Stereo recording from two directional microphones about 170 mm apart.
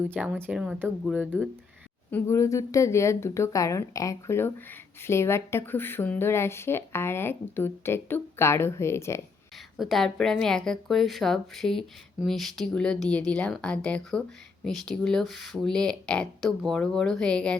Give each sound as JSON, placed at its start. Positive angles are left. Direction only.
{"t": 0.0, "sound": "speech", "side_deg": -10}
{"t": 2.0, "sound": "speech", "side_deg": 15}
{"t": 9.7, "sound": "a woman's voice", "side_deg": 0}